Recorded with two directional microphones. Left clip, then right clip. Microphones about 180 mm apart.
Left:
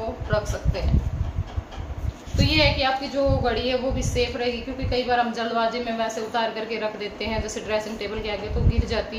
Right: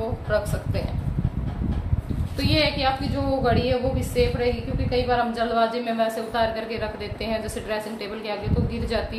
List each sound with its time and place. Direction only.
0.3 s a woman's voice: 25° right (ahead or behind)
2.4 s a woman's voice: 20° right (ahead or behind)